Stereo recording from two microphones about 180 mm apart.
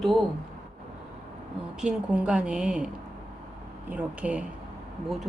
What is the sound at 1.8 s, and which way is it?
Speech, 5° right (ahead or behind).